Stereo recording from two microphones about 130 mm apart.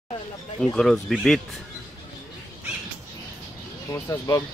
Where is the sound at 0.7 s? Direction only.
Centre (ahead or behind).